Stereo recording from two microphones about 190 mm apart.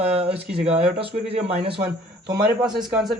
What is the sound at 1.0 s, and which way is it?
Speech, 30° right (ahead or behind).